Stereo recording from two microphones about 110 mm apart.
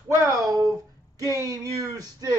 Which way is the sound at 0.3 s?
30° right (ahead or behind).